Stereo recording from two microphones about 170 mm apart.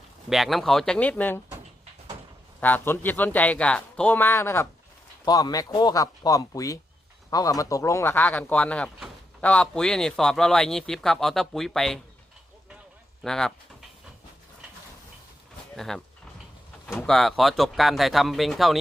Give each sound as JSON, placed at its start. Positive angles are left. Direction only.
{"t": 0.3, "sound": "speech", "side_deg": 0}
{"t": 2.6, "sound": "speech", "side_deg": 10}
{"t": 13.2, "sound": "speech", "side_deg": 5}
{"t": 15.7, "sound": "speech", "side_deg": 0}
{"t": 16.8, "sound": "a sound", "side_deg": 15}
{"t": 17.1, "sound": "speech", "side_deg": 0}